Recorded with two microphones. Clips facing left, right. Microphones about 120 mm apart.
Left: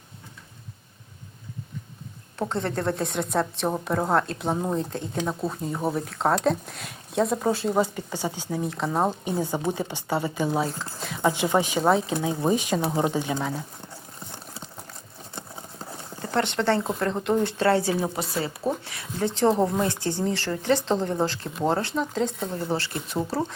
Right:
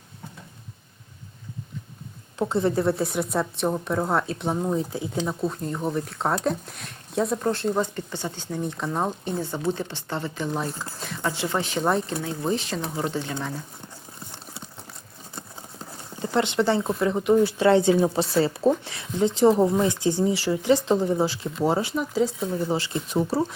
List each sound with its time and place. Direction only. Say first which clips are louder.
2.4 s a woman's voice: right 4 dB; 10° right (ahead or behind)
9.2 s speech: left 1 dB; 15° left (ahead or behind)
10.7 s a woman's voice: even; centre (ahead or behind)
11.2 s speech: left 5 dB; 15° left (ahead or behind)
11.8 s a woman's voice: even; centre (ahead or behind)
12.2 s speech: left 3 dB; 15° left (ahead or behind)
16.2 s speech: right 2 dB; 15° right (ahead or behind)
17.7 s speech: right 5 dB; 20° right (ahead or behind)
19.3 s speech: right 3 dB; 10° right (ahead or behind)
22.7 s speech: right 3 dB; 15° right (ahead or behind)